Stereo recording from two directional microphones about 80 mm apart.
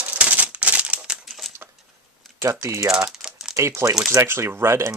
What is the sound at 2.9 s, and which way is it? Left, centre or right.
Typing, centre.